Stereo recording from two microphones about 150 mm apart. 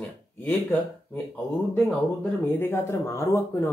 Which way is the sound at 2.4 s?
15° left (ahead or behind).